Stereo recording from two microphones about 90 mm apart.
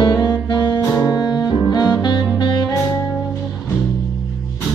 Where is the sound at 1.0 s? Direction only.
45° left (ahead or behind).